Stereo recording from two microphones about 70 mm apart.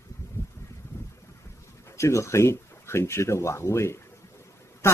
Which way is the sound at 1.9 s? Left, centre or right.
Left.